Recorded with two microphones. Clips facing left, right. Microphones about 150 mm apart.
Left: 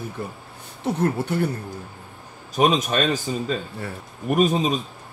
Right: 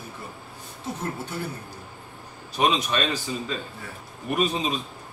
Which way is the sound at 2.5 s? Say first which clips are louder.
Left 4 dB; 45° left (ahead or behind).